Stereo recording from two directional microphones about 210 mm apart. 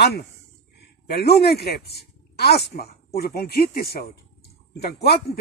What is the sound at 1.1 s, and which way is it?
Speech, 50° left (ahead or behind).